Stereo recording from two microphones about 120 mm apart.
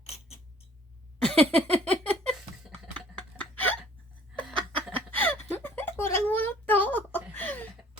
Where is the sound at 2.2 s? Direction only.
5° left (ahead or behind).